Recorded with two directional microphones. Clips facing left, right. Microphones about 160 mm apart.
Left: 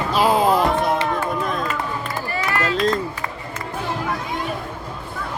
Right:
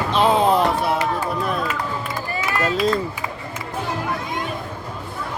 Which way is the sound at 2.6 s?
10° right (ahead or behind).